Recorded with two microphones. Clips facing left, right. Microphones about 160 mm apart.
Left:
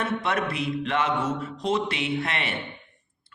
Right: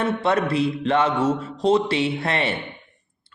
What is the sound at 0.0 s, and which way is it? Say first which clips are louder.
Speech: right 5 dB; 30° right (ahead or behind).